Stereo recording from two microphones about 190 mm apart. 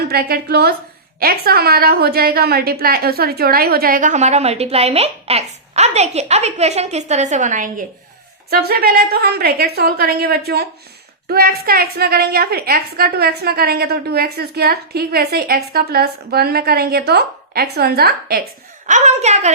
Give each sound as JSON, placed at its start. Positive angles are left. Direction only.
{"t": 0.1, "sound": "a woman's voice", "side_deg": -55}
{"t": 8.4, "sound": "a woman's voice", "side_deg": -55}
{"t": 18.9, "sound": "a woman's voice", "side_deg": -40}